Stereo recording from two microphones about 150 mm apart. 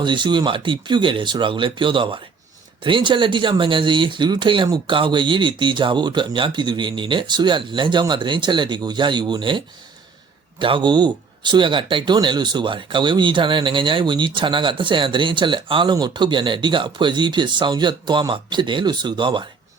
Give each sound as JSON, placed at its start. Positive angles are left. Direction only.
{"t": 0.0, "sound": "speech", "side_deg": -30}